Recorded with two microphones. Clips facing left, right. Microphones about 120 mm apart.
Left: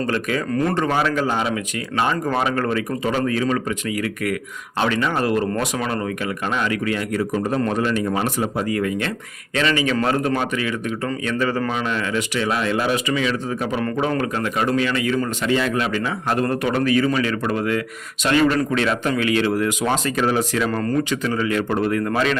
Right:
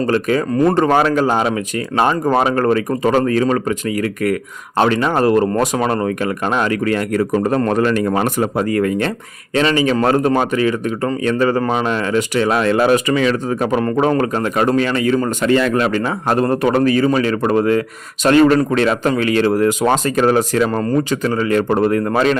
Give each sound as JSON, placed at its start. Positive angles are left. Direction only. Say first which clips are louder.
{"t": 0.1, "sound": "a man's voice", "louder": "right 6 dB", "side_deg": -35}
{"t": 20.7, "sound": "a man's voice", "louder": "right 4 dB", "side_deg": -35}